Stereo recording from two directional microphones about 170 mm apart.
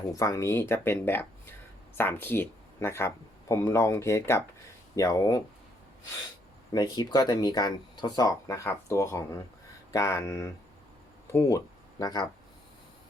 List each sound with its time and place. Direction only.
0.2 s speech: 20° left (ahead or behind)
6.7 s speech: 25° left (ahead or behind)